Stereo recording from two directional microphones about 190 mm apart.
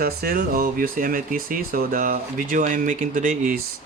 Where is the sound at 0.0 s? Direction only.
50° right (ahead or behind).